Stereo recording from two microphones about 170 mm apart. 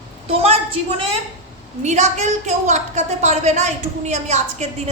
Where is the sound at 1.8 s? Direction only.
45° right (ahead or behind).